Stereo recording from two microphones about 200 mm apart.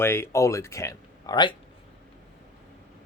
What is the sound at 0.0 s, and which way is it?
Speech, 10° left (ahead or behind).